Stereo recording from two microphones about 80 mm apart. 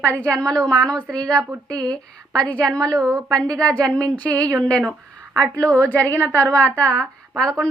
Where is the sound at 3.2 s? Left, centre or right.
Right.